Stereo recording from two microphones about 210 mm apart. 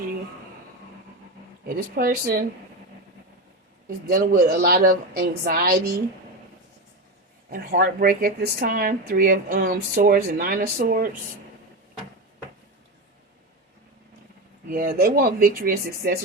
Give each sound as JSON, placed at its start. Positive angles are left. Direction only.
{"t": 1.6, "sound": "speech", "side_deg": -45}
{"t": 3.8, "sound": "speech", "side_deg": -45}
{"t": 7.5, "sound": "speech", "side_deg": -45}
{"t": 14.7, "sound": "speech", "side_deg": -40}